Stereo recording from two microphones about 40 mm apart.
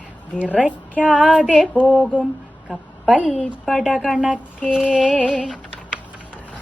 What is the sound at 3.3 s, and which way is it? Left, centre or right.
Speech, centre.